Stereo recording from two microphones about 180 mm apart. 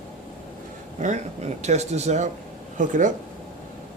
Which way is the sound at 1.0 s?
40° right (ahead or behind).